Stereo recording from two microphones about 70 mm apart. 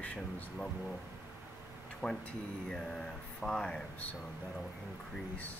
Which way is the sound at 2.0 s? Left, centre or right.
Centre.